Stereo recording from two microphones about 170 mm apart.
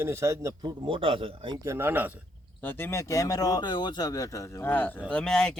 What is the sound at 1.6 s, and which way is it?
Speech, 15° right (ahead or behind).